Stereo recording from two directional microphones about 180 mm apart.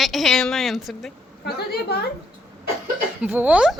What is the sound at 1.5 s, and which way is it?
Speech, 60° left (ahead or behind).